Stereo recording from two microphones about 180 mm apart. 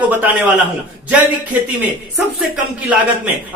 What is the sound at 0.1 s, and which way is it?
Speech, 10° right (ahead or behind).